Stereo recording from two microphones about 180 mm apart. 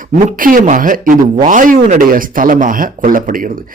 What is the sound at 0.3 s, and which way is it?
A man's voice, 50° right (ahead or behind).